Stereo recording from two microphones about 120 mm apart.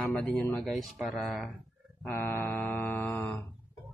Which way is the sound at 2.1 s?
20° left (ahead or behind).